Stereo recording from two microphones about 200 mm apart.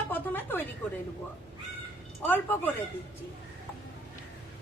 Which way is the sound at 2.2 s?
10° left (ahead or behind).